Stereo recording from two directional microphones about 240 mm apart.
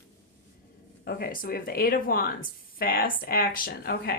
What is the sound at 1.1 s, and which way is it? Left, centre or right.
A woman's voice, left.